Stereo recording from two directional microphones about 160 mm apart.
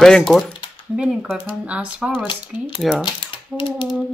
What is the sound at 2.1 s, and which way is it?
Speech, 30° left (ahead or behind).